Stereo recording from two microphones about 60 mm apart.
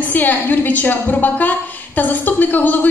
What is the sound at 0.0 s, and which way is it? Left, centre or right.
A woman's voice, left.